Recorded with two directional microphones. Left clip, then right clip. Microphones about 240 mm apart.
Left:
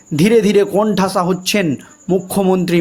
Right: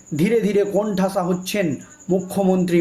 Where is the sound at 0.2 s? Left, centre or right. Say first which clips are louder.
Left 7 dB; left.